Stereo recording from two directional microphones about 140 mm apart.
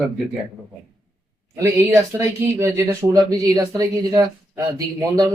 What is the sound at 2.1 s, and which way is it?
Speech, 15° right (ahead or behind).